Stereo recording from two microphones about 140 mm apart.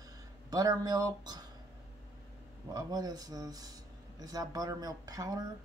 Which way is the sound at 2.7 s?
30° right (ahead or behind).